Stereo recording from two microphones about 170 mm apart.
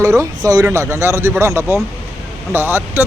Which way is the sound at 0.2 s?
20° right (ahead or behind).